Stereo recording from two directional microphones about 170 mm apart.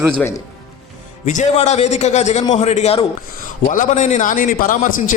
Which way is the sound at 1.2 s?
45° left (ahead or behind).